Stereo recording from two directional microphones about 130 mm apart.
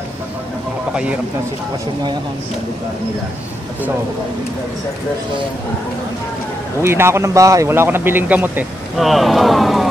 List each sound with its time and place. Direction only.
6.8 s a man's voice: 20° right (ahead or behind)
8.9 s speech: centre (ahead or behind)